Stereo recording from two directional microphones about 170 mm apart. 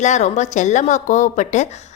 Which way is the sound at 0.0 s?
45° left (ahead or behind).